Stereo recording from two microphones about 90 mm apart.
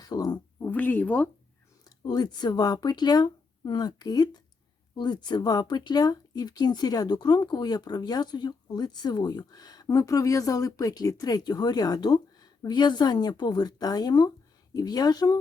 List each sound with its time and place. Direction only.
0.0 s a sound: 45° left (ahead or behind)
0.7 s speech: 20° left (ahead or behind)
2.0 s speech: 50° left (ahead or behind)
9.8 s speech: 35° left (ahead or behind)